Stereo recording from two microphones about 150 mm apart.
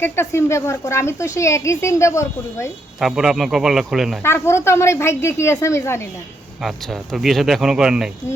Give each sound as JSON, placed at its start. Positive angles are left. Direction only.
{"t": 0.0, "sound": "speech", "side_deg": 15}
{"t": 3.0, "sound": "speech", "side_deg": -5}
{"t": 4.2, "sound": "speech", "side_deg": 15}
{"t": 6.6, "sound": "speech", "side_deg": 0}